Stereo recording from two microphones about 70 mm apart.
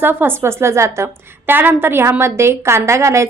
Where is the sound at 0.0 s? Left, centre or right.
Right.